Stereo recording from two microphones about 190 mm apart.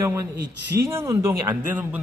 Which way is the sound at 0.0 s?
15° right (ahead or behind).